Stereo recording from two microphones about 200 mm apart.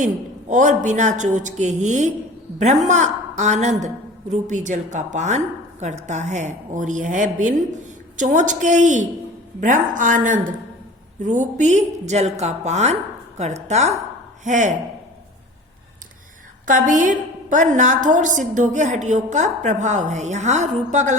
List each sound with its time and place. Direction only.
0.0 s a woman's voice: 40° right (ahead or behind)
16.6 s a woman's voice: 40° right (ahead or behind)